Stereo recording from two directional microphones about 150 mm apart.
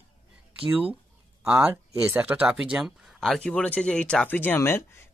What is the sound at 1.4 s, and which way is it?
Speech, 15° right (ahead or behind).